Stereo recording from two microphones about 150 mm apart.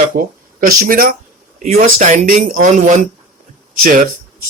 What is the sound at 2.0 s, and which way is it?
Speech, 50° right (ahead or behind).